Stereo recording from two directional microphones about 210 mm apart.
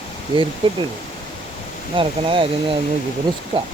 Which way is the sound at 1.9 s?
25° right (ahead or behind).